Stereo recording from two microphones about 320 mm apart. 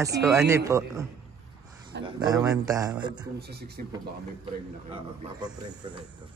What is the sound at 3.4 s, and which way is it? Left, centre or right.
Speech, right.